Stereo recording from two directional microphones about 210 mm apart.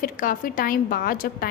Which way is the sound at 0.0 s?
40° left (ahead or behind).